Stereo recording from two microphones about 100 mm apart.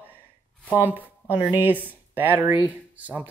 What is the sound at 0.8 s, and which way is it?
Speech, 20° right (ahead or behind).